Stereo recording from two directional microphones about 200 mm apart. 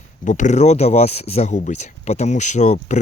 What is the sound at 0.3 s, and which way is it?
Speech, 40° left (ahead or behind).